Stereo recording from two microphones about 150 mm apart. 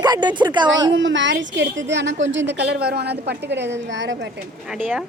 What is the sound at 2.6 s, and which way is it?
Speech, 90° right.